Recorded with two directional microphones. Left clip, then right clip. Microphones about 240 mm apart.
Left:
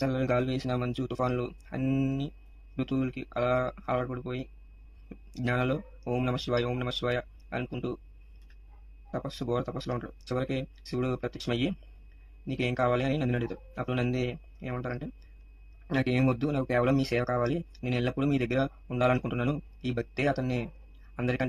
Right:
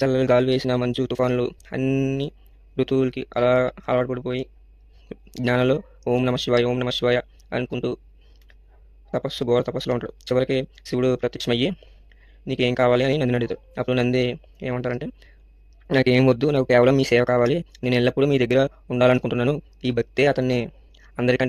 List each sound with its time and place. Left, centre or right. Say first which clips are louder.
0.0 s speech: right 10 dB; right
9.1 s speech: right 11 dB; right